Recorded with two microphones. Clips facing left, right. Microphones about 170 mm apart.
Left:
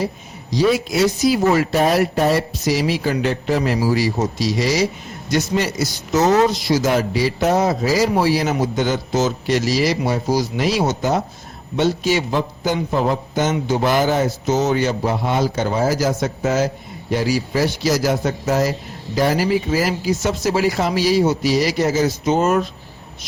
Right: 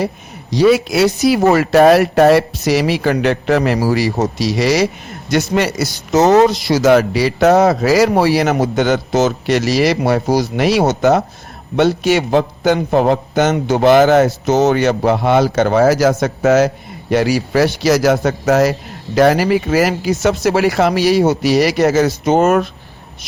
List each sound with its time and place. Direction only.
0.5 s a man's voice: 70° right (ahead or behind)